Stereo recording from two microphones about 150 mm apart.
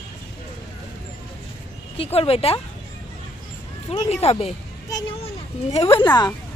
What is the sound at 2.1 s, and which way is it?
Speech, 40° left (ahead or behind).